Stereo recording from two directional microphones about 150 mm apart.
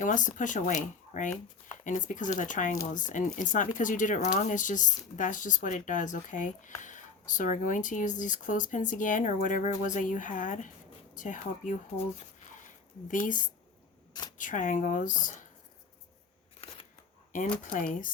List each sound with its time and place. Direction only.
0.0 s speech: 60° left (ahead or behind)
14.1 s camera: 25° left (ahead or behind)
14.3 s speech: 60° left (ahead or behind)